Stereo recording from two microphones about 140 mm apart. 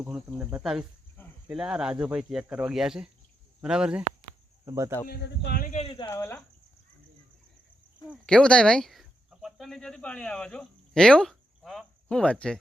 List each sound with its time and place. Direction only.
0.3 s speech: 5° right (ahead or behind)
4.6 s speech: 20° right (ahead or behind)
5.5 s speech: 70° left (ahead or behind)
5.8 s speech: 40° left (ahead or behind)
6.1 s speech: 20° left (ahead or behind)
8.3 s speech: 5° left (ahead or behind)